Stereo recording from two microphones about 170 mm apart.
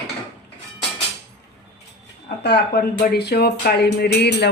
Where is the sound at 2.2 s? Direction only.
75° left (ahead or behind).